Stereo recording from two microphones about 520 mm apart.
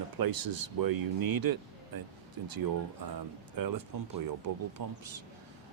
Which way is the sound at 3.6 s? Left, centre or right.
Right.